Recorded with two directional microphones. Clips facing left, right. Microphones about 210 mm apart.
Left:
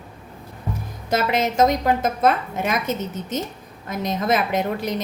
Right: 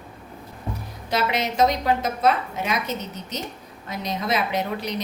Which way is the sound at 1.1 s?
50° left (ahead or behind).